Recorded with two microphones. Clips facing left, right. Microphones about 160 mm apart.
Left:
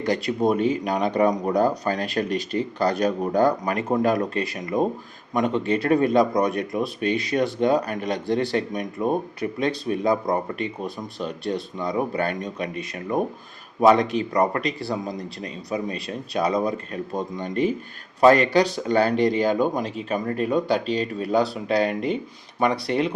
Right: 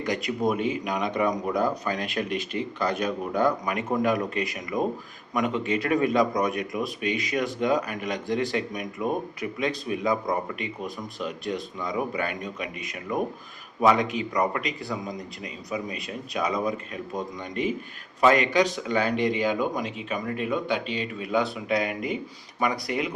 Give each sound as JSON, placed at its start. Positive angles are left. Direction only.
{"t": 0.0, "sound": "speech", "side_deg": 30}